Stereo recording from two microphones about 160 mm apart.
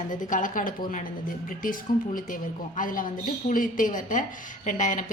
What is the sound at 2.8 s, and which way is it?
A woman's voice, 60° left (ahead or behind).